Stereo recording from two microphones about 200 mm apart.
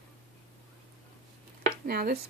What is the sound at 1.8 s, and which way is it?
Speech, 50° right (ahead or behind).